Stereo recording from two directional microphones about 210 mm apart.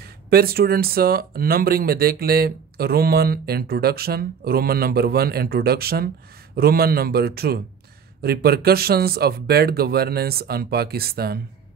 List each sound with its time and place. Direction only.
0.0 s speech: 45° right (ahead or behind)